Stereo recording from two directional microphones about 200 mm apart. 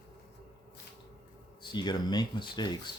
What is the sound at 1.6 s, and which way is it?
Speech, 20° left (ahead or behind).